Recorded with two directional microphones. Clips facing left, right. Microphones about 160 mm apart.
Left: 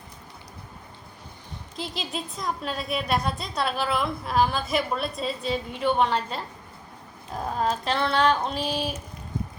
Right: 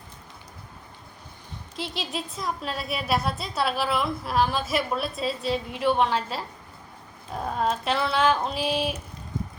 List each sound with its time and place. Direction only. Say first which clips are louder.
1.7 s a woman's voice: right 1 dB; centre (ahead or behind)